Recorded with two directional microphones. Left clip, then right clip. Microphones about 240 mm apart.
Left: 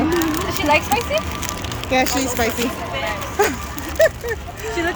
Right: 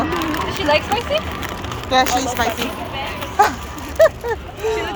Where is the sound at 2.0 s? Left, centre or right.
Right.